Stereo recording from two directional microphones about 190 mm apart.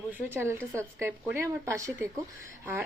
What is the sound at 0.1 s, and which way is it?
A woman's voice, 10° right (ahead or behind).